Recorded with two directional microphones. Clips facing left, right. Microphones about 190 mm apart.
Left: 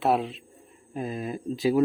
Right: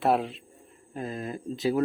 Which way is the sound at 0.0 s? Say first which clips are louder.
Even; centre (ahead or behind).